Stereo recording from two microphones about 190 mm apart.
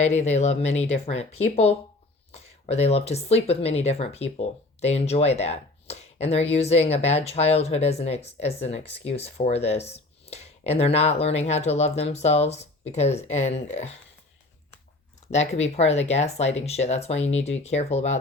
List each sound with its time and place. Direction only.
0.0 s speech: 35° left (ahead or behind)
15.3 s speech: 35° left (ahead or behind)